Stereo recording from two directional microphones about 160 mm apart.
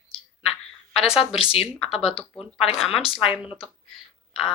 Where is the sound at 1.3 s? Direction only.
35° left (ahead or behind).